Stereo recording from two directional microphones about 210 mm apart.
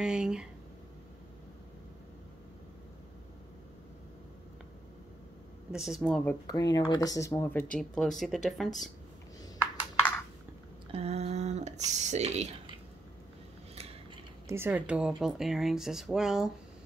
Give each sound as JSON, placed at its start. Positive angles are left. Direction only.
{"t": 0.0, "sound": "speech", "side_deg": -5}
{"t": 5.7, "sound": "speech", "side_deg": -5}
{"t": 6.4, "sound": "speech", "side_deg": 20}
{"t": 7.7, "sound": "speech", "side_deg": 5}
{"t": 10.9, "sound": "speech", "side_deg": -30}
{"t": 14.5, "sound": "speech", "side_deg": -10}